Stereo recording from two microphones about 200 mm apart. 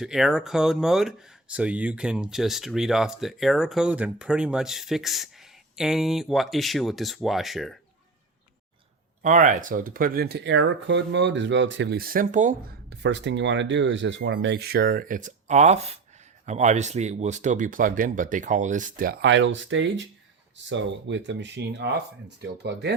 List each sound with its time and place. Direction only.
0.0 s speech: centre (ahead or behind)
9.2 s speech: 40° right (ahead or behind)
12.9 s speech: 65° right (ahead or behind); by 19.1 s 40° right (ahead or behind)
19.2 s speech: 65° right (ahead or behind)